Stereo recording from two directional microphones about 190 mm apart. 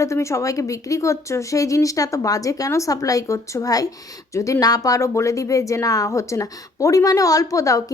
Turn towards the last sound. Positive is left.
turn(degrees=15)  # may be behind; listen again after turning